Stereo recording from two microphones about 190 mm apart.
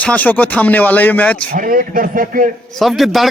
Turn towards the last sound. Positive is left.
turn(degrees=0)  # may be behind; listen again after turning